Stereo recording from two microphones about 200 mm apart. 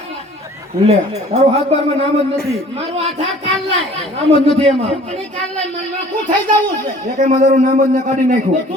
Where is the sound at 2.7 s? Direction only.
30° right (ahead or behind).